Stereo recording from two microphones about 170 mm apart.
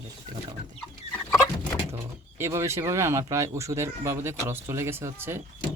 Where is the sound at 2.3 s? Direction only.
15° right (ahead or behind).